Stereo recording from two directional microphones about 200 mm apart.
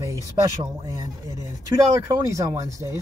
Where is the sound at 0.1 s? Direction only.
20° right (ahead or behind).